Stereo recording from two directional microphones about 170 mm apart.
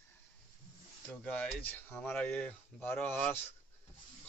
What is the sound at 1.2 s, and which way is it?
Speech, 10° left (ahead or behind).